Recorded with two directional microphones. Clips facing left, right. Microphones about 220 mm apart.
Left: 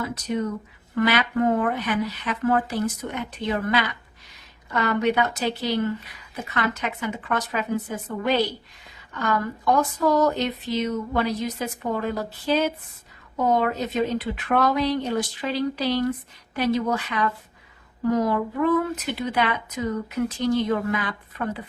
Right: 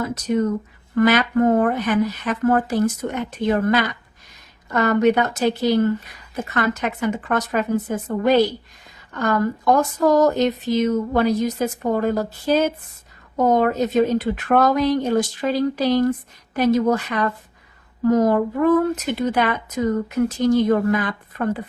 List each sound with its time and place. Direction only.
0.0 s speech: 45° right (ahead or behind)